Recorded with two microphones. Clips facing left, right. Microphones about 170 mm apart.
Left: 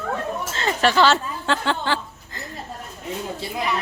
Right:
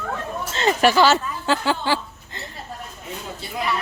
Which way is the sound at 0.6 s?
20° right (ahead or behind).